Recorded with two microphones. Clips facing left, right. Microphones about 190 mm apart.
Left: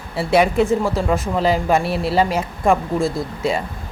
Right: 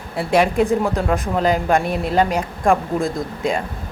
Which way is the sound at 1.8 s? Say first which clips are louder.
Even; 45° right (ahead or behind).